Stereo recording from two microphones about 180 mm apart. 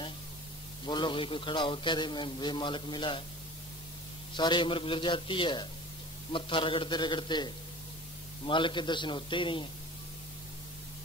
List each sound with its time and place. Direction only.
0.8 s a man's voice: 25° left (ahead or behind)
4.4 s a man's voice: 25° left (ahead or behind)